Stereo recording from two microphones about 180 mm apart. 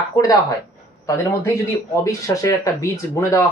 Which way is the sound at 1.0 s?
15° left (ahead or behind).